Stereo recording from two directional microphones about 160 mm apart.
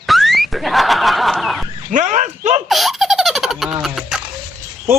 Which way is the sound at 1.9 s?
50° right (ahead or behind).